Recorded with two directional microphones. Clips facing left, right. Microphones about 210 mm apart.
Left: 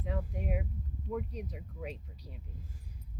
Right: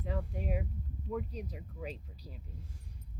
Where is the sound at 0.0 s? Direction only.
5° left (ahead or behind).